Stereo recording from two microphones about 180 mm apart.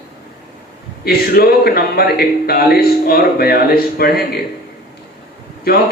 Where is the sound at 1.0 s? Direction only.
60° left (ahead or behind).